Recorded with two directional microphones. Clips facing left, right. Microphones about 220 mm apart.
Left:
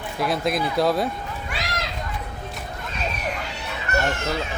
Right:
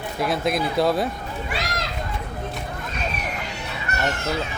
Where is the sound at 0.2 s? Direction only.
Centre (ahead or behind).